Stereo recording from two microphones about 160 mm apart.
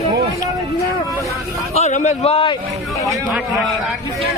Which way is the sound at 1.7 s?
45° left (ahead or behind).